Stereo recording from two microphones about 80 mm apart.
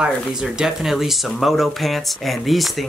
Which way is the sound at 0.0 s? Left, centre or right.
Centre.